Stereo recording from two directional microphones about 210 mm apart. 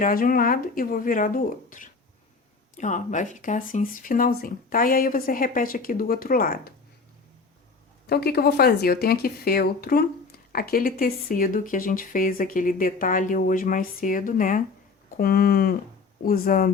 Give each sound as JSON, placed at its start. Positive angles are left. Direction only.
{"t": 0.0, "sound": "speech", "side_deg": 45}
{"t": 8.0, "sound": "speech", "side_deg": 50}